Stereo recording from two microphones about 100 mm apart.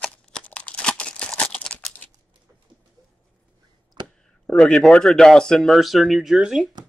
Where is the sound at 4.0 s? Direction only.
50° right (ahead or behind).